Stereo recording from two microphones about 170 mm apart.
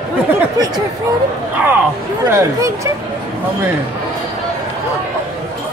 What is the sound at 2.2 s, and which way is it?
Speech, 20° right (ahead or behind).